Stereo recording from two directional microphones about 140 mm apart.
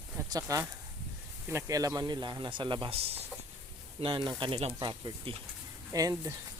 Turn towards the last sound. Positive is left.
turn(degrees=-25)  # may be behind; listen again after turning